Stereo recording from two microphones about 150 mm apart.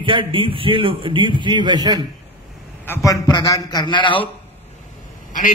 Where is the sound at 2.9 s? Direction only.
20° left (ahead or behind).